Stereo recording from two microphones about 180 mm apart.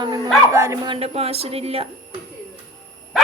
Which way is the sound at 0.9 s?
35° right (ahead or behind).